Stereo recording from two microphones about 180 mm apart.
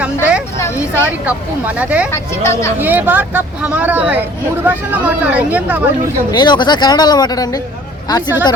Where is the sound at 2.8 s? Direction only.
10° right (ahead or behind).